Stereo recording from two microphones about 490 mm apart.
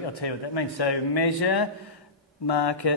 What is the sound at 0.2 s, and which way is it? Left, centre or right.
Speech, left.